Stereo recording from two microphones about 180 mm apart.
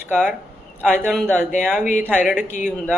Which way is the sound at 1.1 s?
5° left (ahead or behind).